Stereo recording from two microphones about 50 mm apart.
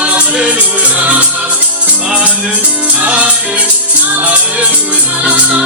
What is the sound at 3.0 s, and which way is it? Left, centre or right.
Music, right.